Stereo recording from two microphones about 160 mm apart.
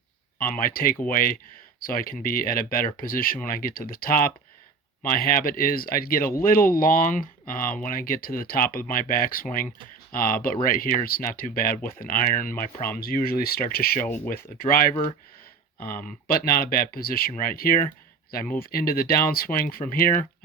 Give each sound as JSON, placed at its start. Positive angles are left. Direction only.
{"t": 0.3, "sound": "speech", "side_deg": 60}